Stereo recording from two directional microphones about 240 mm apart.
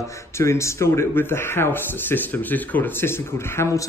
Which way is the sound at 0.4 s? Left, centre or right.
Centre.